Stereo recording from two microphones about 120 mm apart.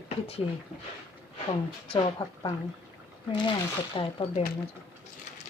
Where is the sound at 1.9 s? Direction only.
40° left (ahead or behind).